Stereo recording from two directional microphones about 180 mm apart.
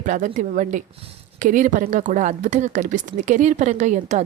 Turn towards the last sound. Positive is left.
turn(degrees=-40)  # may be behind; listen again after turning